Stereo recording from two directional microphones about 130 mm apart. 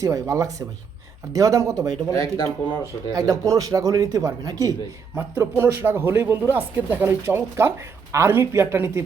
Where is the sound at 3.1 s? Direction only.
25° right (ahead or behind).